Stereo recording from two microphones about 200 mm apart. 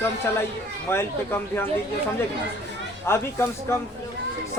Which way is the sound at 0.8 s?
10° left (ahead or behind).